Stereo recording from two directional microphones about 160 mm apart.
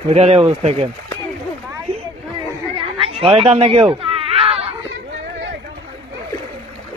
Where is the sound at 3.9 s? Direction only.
35° right (ahead or behind).